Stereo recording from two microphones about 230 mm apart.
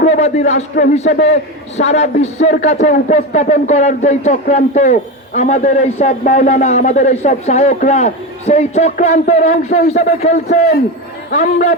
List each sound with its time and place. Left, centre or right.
0.0 s a man's voice: left